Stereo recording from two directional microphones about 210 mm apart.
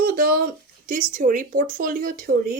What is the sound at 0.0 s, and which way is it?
Speech, 45° right (ahead or behind).